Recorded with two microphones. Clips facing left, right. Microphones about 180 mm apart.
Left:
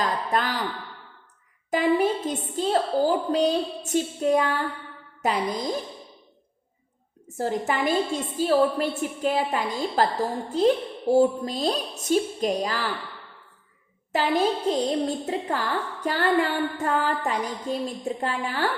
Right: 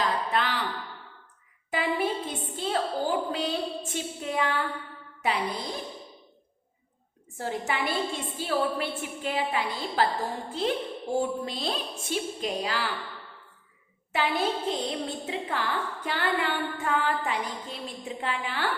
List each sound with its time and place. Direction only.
0.0 s a sound: 45° left (ahead or behind)
1.7 s a woman's voice: 40° left (ahead or behind)
7.3 s a woman's voice: 40° left (ahead or behind)
11.1 s a woman's voice: 40° left (ahead or behind)
14.1 s a woman's voice: 40° left (ahead or behind)